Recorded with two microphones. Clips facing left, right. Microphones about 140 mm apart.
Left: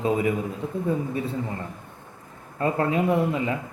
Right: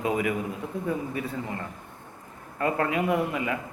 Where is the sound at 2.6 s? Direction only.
30° left (ahead or behind).